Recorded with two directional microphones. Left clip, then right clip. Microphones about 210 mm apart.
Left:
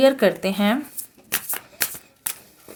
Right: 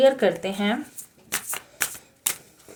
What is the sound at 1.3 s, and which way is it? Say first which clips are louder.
Shuffling cards: left 2 dB; 10° left (ahead or behind).